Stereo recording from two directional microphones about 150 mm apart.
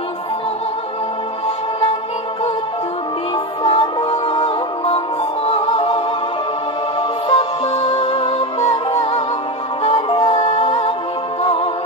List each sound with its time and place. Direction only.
3.6 s music: 40° left (ahead or behind)
7.0 s music: 35° left (ahead or behind)